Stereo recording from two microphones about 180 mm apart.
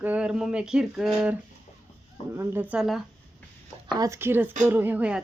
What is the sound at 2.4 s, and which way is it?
Speech, 10° right (ahead or behind).